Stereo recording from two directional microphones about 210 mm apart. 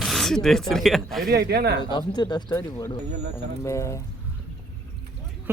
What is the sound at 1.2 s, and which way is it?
Speech, 50° right (ahead or behind).